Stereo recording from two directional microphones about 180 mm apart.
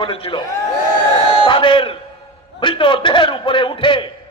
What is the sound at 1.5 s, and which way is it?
Crowd, 30° left (ahead or behind).